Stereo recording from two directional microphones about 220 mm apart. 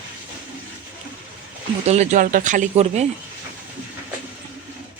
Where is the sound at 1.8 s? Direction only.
30° right (ahead or behind).